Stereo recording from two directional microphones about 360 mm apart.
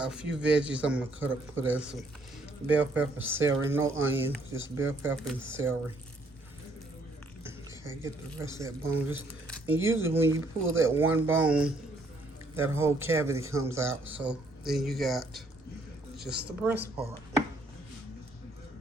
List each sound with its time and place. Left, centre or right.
0.0 s speech: centre
8.0 s speech: centre
16.3 s speech: right